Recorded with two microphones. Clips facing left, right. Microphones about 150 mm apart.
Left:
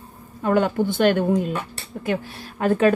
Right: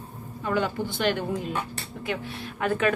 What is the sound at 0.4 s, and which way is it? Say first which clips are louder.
Speech: left 7 dB; 50° left (ahead or behind).